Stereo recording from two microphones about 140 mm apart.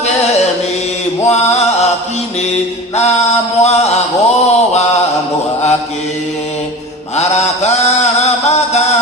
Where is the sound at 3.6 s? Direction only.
50° left (ahead or behind).